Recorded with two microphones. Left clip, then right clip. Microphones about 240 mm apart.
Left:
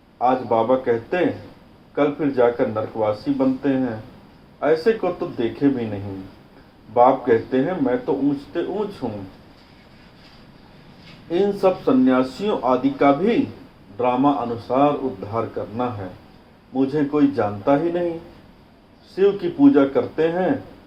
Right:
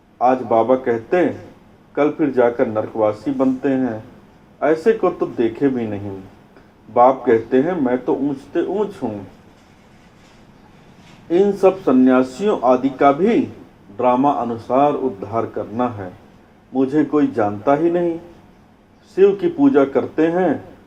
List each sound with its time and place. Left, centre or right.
0.2 s speech: right
11.3 s speech: right
19.1 s speech: right